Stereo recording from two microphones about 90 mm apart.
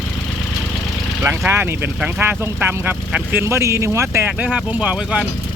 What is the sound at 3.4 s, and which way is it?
Speech, 35° right (ahead or behind).